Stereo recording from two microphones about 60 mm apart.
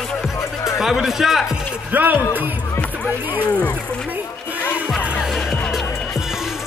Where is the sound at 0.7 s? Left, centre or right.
Centre.